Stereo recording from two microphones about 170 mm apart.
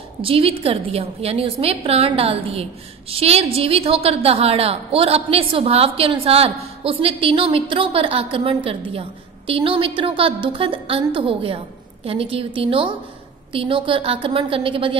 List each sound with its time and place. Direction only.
0.2 s a woman's voice: 35° right (ahead or behind)